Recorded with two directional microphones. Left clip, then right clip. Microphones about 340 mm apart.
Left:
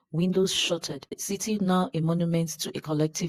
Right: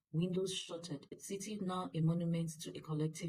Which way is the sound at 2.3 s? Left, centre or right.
Left.